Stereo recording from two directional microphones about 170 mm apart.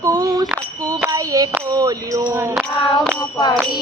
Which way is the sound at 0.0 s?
20° right (ahead or behind).